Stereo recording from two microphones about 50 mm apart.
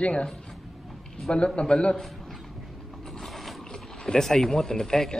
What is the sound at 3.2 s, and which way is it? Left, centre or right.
Mechanisms, centre.